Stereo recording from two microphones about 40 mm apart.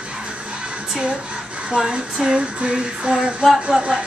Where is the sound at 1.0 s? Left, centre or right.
Right.